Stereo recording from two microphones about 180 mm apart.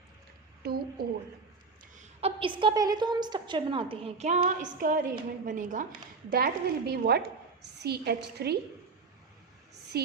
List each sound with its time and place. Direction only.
0.6 s a sound: 60° right (ahead or behind)
2.0 s a woman's voice: 30° right (ahead or behind); by 5.8 s 45° right (ahead or behind)
6.3 s a woman's voice: 60° right (ahead or behind)
9.9 s a woman's voice: 60° right (ahead or behind)